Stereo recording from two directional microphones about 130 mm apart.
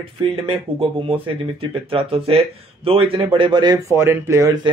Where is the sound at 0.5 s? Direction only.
45° right (ahead or behind).